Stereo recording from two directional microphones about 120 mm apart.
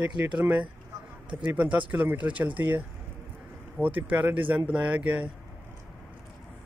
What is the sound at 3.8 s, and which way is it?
Speech, 15° right (ahead or behind).